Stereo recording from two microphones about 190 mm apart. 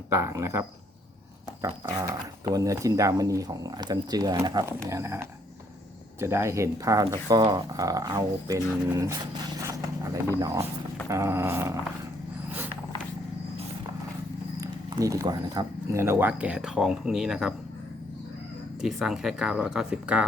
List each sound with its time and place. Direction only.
0.1 s speech: 15° right (ahead or behind)
1.9 s speech: 20° right (ahead or behind)
14.6 s speech: 20° right (ahead or behind); by 17.5 s centre (ahead or behind)
18.8 s speech: centre (ahead or behind)